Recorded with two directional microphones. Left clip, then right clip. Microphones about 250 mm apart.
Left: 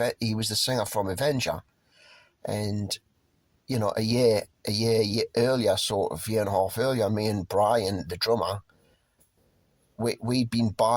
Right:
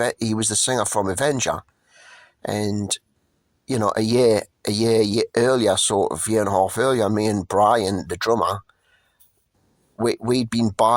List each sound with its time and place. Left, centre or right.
0.0 s speech: right
10.2 s speech: right